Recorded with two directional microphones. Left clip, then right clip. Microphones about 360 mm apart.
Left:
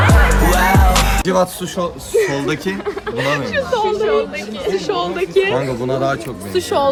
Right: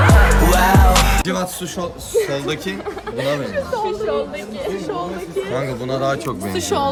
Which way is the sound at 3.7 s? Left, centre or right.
Left.